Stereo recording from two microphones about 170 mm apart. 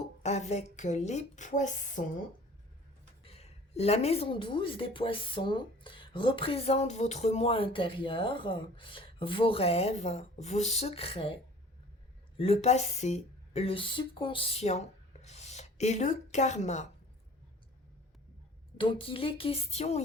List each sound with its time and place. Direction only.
0.2 s a woman's voice: 40° left (ahead or behind)
3.2 s a woman's voice: 35° left (ahead or behind)
12.4 s speech: 40° left (ahead or behind)
18.8 s a woman's voice: 30° left (ahead or behind)